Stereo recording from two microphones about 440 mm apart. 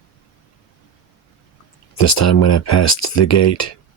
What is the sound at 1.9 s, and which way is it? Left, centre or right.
Speech, left.